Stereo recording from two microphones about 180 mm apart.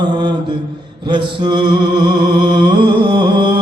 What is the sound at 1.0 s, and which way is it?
Music, 25° right (ahead or behind).